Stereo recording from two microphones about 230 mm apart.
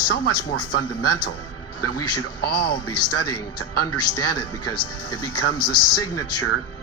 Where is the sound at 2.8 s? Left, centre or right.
Left.